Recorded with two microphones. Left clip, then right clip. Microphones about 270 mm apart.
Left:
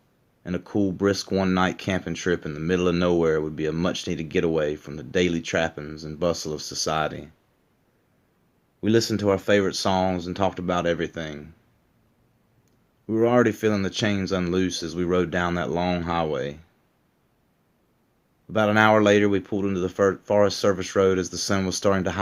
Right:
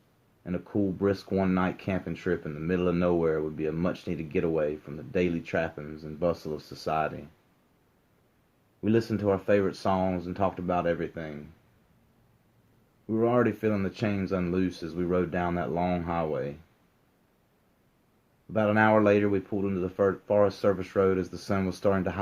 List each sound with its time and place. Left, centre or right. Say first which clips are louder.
0.4 s speech: left 4 dB; left
8.8 s speech: left 5 dB; left
13.1 s speech: left 5 dB; left
18.5 s speech: left 5 dB; left